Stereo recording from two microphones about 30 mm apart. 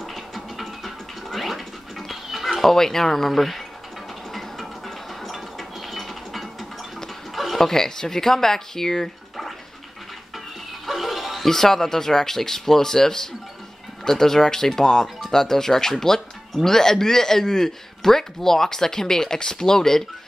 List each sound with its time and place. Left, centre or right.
0.0 s music: centre
2.7 s speech: centre
4.3 s music: centre
7.3 s a sound: centre
7.6 s speech: centre
10.9 s music: centre
11.4 s speech: centre